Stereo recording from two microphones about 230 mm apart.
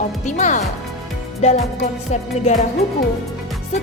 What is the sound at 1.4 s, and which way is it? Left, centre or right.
Music, left.